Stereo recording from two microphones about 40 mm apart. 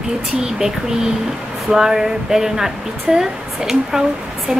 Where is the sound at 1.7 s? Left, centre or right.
Centre.